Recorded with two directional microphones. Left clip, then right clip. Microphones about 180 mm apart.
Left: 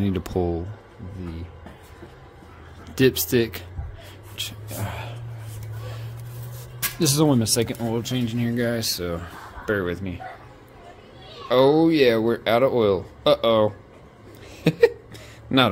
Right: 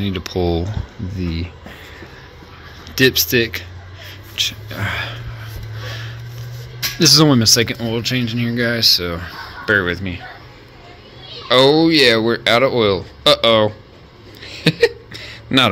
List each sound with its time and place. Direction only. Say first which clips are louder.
0.0 s speech: right 3 dB; 30° left (ahead or behind)
2.9 s speech: right 6 dB; 25° left (ahead or behind)
4.4 s speech: right 12 dB; 15° left (ahead or behind)
4.7 s speech: right 8 dB; centre (ahead or behind)
7.0 s speech: right 9 dB; centre (ahead or behind)
11.4 s speech: right 5 dB; 10° left (ahead or behind)
14.4 s a sound: right 3 dB; 10° left (ahead or behind)